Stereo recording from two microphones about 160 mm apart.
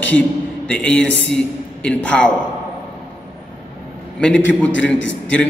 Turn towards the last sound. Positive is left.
turn(degrees=10)  # may be behind; listen again after turning